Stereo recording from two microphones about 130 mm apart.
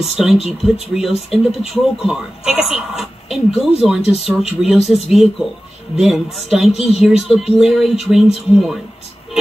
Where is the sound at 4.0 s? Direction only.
50° left (ahead or behind).